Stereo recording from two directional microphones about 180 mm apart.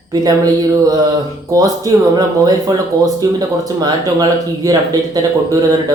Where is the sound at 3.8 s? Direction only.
20° right (ahead or behind).